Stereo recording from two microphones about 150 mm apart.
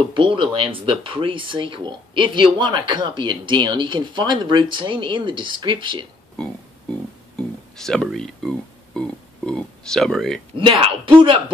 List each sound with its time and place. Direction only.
0.1 s speech: 35° right (ahead or behind)
7.3 s music: 5° left (ahead or behind)
10.5 s speech: 35° right (ahead or behind)